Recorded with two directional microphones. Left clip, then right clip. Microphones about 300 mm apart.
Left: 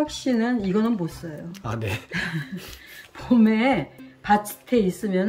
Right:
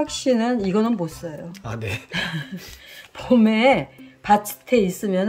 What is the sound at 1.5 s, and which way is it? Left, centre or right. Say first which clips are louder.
Speech: left 4 dB; centre.